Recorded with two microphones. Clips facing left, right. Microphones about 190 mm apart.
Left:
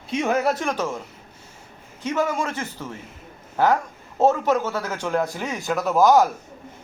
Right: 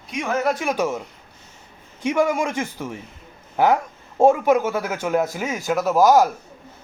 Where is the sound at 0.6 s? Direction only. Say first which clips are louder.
Right 3 dB; 10° right (ahead or behind).